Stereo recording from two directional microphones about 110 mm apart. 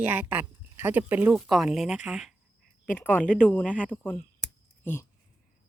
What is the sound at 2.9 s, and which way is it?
Speech, 20° left (ahead or behind).